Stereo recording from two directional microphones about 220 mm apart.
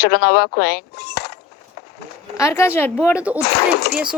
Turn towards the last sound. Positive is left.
turn(degrees=45)  # may be behind; listen again after turning